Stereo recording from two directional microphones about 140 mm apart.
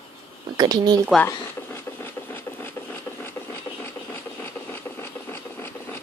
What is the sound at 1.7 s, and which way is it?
Rub, 15° left (ahead or behind).